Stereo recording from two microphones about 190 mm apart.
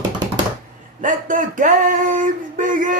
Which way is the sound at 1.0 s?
45° right (ahead or behind).